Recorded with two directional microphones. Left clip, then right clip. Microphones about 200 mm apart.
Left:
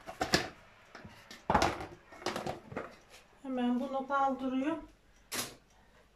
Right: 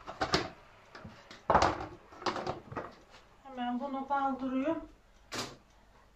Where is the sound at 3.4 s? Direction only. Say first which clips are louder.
Left 8 dB; 60° left (ahead or behind).